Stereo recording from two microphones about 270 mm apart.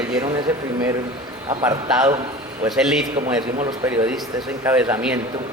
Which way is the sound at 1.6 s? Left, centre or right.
Centre.